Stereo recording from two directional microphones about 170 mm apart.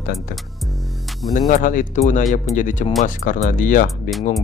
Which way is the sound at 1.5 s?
50° left (ahead or behind).